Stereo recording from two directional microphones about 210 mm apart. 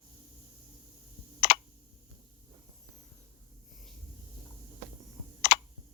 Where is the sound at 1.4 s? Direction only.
50° left (ahead or behind).